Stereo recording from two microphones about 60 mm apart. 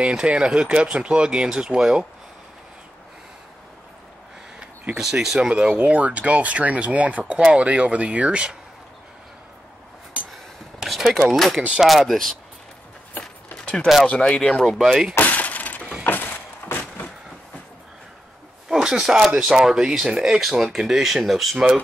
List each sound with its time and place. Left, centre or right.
0.0 s speech: centre
4.6 s speech: centre
10.3 s a sound: centre
11.3 s speech: centre
14.0 s speech: centre
14.8 s speech: centre
15.1 s breaking: left
16.0 s a sound: left
18.7 s speech: centre